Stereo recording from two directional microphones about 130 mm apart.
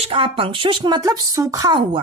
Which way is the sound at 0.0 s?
45° right (ahead or behind).